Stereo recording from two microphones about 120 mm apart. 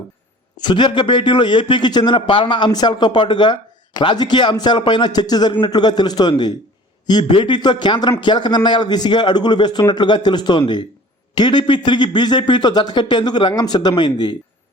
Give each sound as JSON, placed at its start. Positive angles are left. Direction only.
{"t": 0.5, "sound": "a man's voice", "side_deg": 40}